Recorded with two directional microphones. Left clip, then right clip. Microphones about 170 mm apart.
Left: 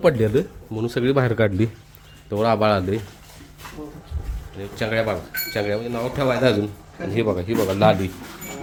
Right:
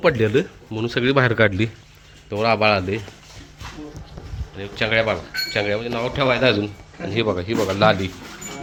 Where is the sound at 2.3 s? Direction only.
25° left (ahead or behind).